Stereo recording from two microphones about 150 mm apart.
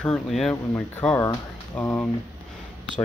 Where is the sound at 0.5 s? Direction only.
10° left (ahead or behind).